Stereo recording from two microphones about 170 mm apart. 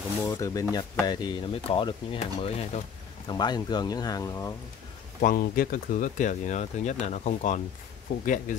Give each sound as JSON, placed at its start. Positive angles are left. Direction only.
{"t": 0.3, "sound": "speech", "side_deg": 20}
{"t": 3.3, "sound": "speech", "side_deg": 25}
{"t": 5.2, "sound": "speech", "side_deg": 55}